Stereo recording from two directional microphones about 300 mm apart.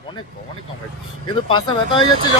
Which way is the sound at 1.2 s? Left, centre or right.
Centre.